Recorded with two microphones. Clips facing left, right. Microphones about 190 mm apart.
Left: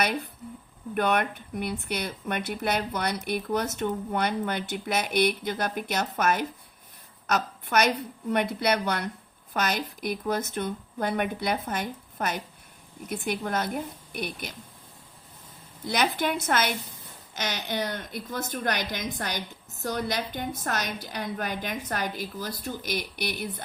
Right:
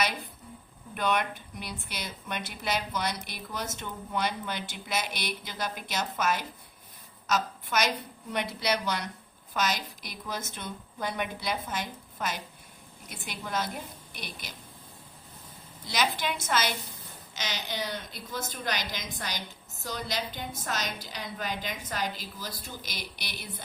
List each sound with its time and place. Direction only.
0.9 s a woman's voice: 55° left (ahead or behind)
15.9 s speech: 55° left (ahead or behind)